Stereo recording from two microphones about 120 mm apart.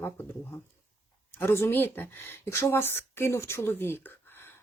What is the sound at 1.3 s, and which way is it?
Speech, 20° left (ahead or behind).